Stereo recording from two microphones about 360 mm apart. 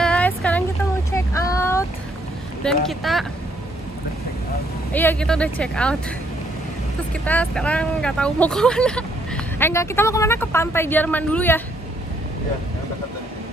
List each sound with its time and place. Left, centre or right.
0.0 s a sound: centre
2.6 s speech: centre
4.9 s speech: centre
7.2 s speech: centre